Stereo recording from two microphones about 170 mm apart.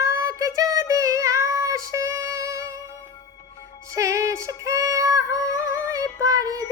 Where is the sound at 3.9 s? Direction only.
20° right (ahead or behind).